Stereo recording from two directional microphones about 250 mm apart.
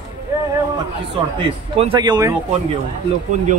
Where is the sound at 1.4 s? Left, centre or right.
Right.